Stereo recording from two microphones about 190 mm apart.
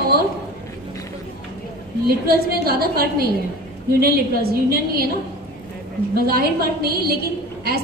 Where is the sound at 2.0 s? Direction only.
55° right (ahead or behind).